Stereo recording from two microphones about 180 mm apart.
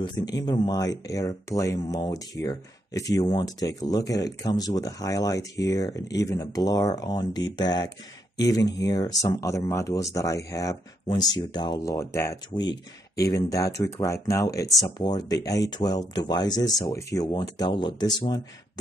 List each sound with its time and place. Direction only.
0.0 s speech: 25° left (ahead or behind)